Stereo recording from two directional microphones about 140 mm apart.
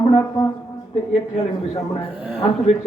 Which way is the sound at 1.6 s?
40° left (ahead or behind).